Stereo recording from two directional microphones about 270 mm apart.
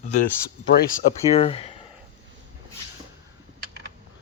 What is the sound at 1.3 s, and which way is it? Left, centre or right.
Speech, left.